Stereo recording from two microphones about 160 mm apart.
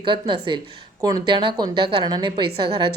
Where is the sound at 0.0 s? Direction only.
30° right (ahead or behind).